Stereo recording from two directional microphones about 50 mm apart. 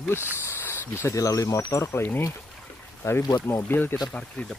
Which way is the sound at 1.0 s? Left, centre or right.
Left.